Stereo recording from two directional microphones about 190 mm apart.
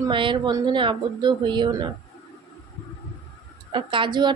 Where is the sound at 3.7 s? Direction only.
25° right (ahead or behind).